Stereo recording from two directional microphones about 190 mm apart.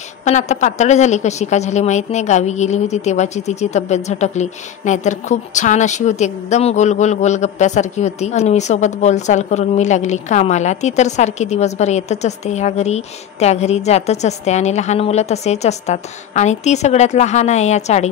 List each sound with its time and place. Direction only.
0.2 s a woman's voice: 40° left (ahead or behind)